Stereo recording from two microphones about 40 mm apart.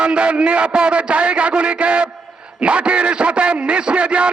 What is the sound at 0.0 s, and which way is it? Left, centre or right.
A man's voice, right.